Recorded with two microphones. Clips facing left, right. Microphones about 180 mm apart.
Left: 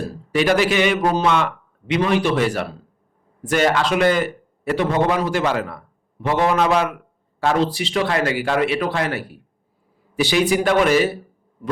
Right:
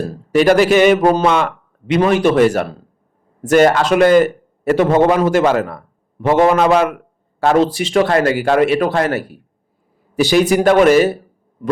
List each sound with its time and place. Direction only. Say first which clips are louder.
0.3 s a man's voice: right 6 dB; 40° right (ahead or behind)